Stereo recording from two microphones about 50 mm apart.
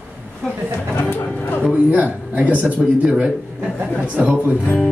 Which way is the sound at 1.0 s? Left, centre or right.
Left.